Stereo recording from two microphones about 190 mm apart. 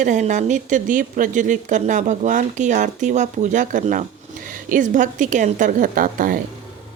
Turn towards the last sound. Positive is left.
turn(degrees=-45)  # may be behind; listen again after turning